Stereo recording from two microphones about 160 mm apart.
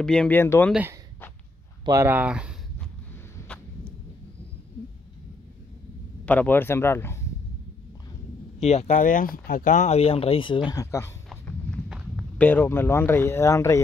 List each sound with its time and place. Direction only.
0.0 s speech: 5° left (ahead or behind)
1.9 s speech: 15° right (ahead or behind)
6.2 s speech: 10° left (ahead or behind)
8.5 s speech: 40° left (ahead or behind); by 11.1 s 20° left (ahead or behind)
12.4 s speech: 10° left (ahead or behind)